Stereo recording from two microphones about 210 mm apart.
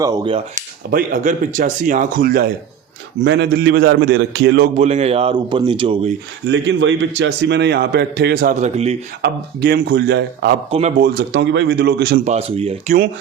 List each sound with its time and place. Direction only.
0.0 s speech: 20° right (ahead or behind)
0.5 s speech: 40° right (ahead or behind)
3.2 s a man's voice: 55° right (ahead or behind)
4.8 s speech: 30° right (ahead or behind)
6.5 s a man's voice: 60° right (ahead or behind); by 9.0 s 30° right (ahead or behind)
9.2 s a man's voice: 50° right (ahead or behind)
10.7 s speech: 30° right (ahead or behind)
11.0 s a man's voice: 50° right (ahead or behind)
12.2 s speech: 30° right (ahead or behind)